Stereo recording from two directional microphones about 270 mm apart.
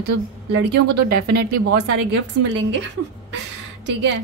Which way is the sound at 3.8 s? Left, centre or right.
Right.